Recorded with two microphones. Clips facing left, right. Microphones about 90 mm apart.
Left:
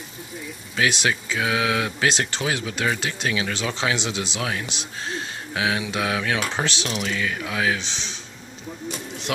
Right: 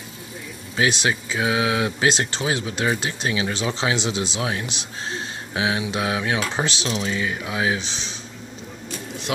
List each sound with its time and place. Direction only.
0.7 s speech: 25° right (ahead or behind)
7.8 s a man's voice: 25° left (ahead or behind)